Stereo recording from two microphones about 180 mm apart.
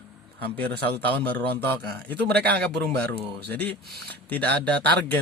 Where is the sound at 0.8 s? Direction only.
60° right (ahead or behind).